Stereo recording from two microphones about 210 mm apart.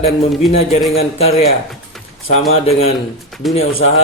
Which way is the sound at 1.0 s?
30° left (ahead or behind).